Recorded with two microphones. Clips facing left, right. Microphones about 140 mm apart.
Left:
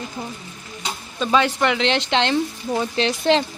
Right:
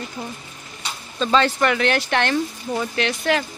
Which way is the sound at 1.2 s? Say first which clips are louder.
Even; 15° left (ahead or behind).